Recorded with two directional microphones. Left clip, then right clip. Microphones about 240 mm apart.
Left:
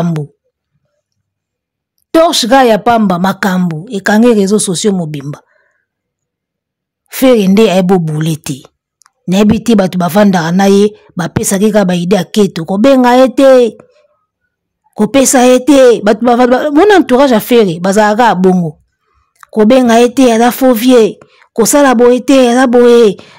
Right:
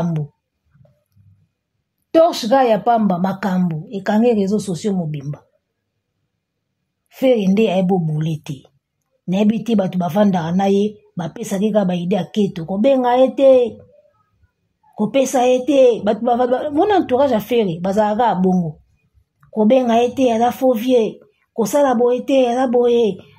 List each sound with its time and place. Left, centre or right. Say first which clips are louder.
2.0 s a woman's voice: left 6 dB; left
7.1 s a woman's voice: left 8 dB; left
15.0 s a woman's voice: left 8 dB; left